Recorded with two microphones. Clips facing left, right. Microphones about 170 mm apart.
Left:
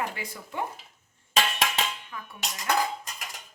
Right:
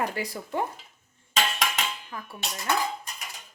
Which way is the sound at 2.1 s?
40° right (ahead or behind).